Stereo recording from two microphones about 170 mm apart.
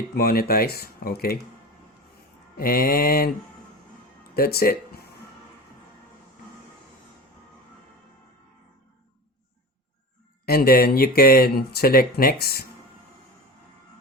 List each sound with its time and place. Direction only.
0.1 s speech: 65° left (ahead or behind)
2.6 s speech: 60° left (ahead or behind)
4.4 s speech: 60° left (ahead or behind)
10.4 s speech: 65° left (ahead or behind)